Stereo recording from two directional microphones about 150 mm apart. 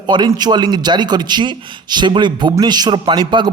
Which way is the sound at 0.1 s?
30° right (ahead or behind).